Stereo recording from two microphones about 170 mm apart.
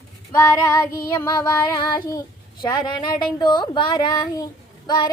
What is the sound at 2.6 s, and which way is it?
Speech, 25° left (ahead or behind).